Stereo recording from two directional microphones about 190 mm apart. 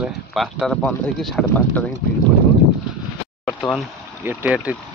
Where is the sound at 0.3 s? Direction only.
Centre (ahead or behind).